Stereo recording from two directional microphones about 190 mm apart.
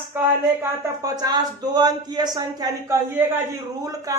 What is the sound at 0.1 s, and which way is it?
A man's voice, 10° right (ahead or behind).